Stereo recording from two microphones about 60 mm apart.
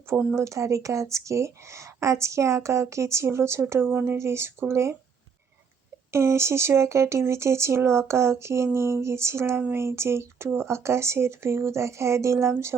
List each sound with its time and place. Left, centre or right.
0.3 s speech: right
4.2 s speech: right
6.1 s speech: right